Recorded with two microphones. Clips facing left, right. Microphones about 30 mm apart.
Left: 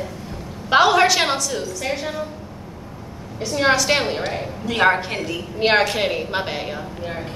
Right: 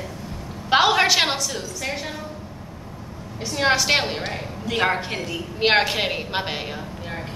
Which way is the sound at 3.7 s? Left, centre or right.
Centre.